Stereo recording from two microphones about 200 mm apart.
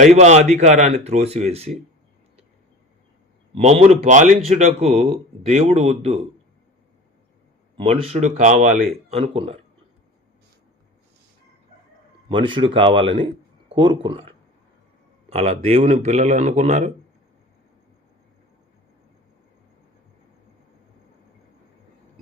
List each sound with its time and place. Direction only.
0.0 s speech: 35° right (ahead or behind)
3.5 s speech: 35° right (ahead or behind)
7.8 s speech: 30° right (ahead or behind)
12.3 s speech: 25° right (ahead or behind)